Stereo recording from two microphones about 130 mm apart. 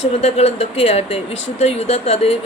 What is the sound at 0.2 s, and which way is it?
Speech, 50° left (ahead or behind).